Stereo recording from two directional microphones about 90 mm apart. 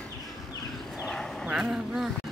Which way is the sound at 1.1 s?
5° left (ahead or behind).